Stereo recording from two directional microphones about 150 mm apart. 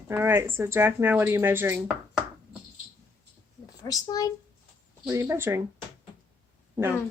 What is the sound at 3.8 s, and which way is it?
Speech, 25° left (ahead or behind).